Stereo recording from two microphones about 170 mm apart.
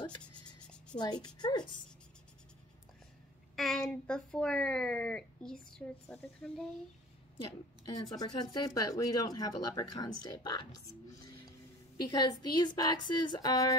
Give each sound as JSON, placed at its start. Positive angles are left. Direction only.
{"t": 0.9, "sound": "speech", "side_deg": 25}
{"t": 3.5, "sound": "speech", "side_deg": 0}
{"t": 7.8, "sound": "speech", "side_deg": 25}